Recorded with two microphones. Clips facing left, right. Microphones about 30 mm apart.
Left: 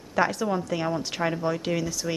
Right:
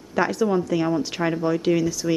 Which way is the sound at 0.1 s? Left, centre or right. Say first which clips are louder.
Right 3 dB; centre.